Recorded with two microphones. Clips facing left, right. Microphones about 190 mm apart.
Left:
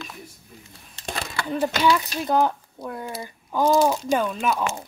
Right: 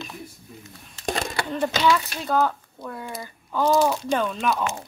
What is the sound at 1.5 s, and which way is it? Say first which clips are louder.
Speech: left 1 dB; 10° left (ahead or behind).